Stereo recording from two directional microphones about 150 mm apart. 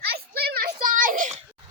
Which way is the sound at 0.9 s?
65° right (ahead or behind).